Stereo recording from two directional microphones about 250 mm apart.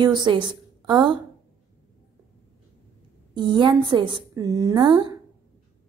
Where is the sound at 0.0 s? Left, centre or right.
Centre.